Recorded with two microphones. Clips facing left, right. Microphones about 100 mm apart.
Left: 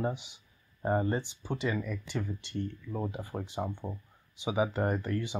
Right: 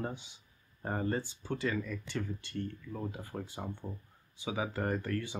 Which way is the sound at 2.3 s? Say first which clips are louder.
Left 3 dB; 25° left (ahead or behind).